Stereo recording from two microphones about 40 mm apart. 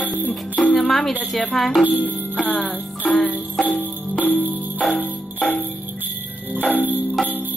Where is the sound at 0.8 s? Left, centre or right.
Centre.